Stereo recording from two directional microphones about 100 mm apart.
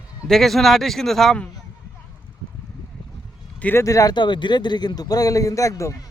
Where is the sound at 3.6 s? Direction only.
20° left (ahead or behind).